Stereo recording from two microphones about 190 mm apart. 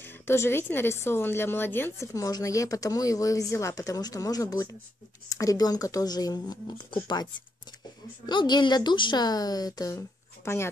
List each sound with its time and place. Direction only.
0.3 s a woman's voice: 10° left (ahead or behind)